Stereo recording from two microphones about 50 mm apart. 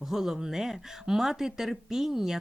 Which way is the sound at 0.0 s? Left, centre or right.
Centre.